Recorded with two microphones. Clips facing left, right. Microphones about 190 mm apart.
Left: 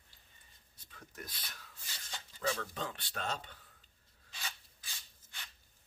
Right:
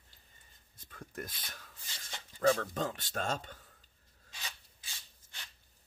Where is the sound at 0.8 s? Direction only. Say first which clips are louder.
Right 6 dB; 50° right (ahead or behind).